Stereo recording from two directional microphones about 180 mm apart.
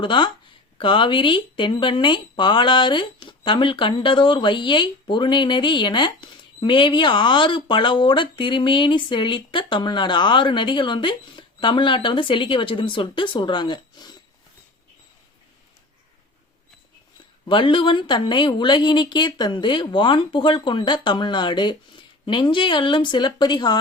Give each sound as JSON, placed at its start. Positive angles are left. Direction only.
{"t": 0.0, "sound": "speech", "side_deg": 25}
{"t": 17.4, "sound": "speech", "side_deg": 25}